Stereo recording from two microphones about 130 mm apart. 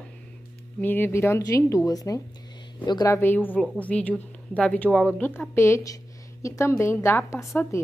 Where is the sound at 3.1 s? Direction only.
15° left (ahead or behind).